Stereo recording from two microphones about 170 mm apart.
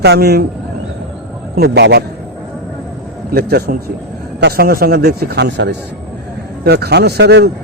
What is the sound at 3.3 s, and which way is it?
A man's voice, 65° right (ahead or behind).